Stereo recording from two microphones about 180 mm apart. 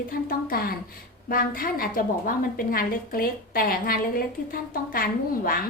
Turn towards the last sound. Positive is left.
turn(degrees=55)  # may be behind; listen again after turning